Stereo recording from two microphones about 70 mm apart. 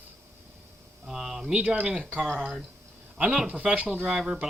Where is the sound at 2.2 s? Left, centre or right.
Centre.